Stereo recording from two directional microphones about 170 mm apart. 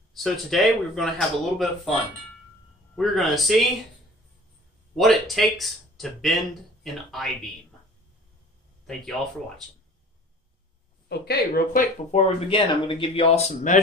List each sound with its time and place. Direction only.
0.1 s speech: centre (ahead or behind)
4.9 s speech: centre (ahead or behind)
11.1 s speech: 70° left (ahead or behind); by 13.7 s 40° left (ahead or behind)